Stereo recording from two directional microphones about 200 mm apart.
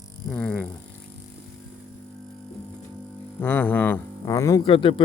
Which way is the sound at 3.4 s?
10° left (ahead or behind).